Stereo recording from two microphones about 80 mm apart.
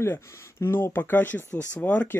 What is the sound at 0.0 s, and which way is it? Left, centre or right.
Speech, left.